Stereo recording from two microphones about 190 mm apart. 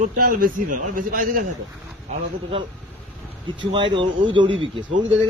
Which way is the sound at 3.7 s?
25° right (ahead or behind).